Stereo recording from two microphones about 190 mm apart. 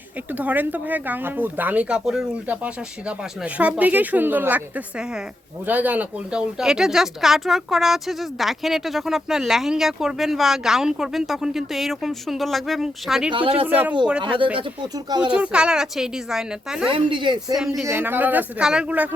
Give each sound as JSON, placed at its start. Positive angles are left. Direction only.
{"t": 0.3, "sound": "speech", "side_deg": -10}
{"t": 13.3, "sound": "speech", "side_deg": -30}
{"t": 13.7, "sound": "speech", "side_deg": -10}
{"t": 14.2, "sound": "speech", "side_deg": -25}
{"t": 15.3, "sound": "speech", "side_deg": -5}
{"t": 16.9, "sound": "speech", "side_deg": -25}
{"t": 17.8, "sound": "speech", "side_deg": -10}